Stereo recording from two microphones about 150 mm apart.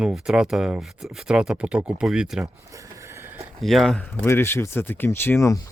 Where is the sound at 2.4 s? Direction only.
20° right (ahead or behind).